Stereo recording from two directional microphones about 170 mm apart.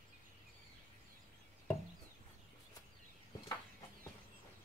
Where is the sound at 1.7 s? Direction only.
10° left (ahead or behind).